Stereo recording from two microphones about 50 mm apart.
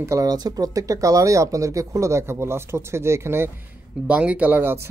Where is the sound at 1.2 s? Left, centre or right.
Right.